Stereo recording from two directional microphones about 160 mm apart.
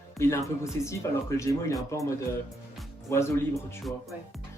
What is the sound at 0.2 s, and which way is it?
Speech, 15° left (ahead or behind).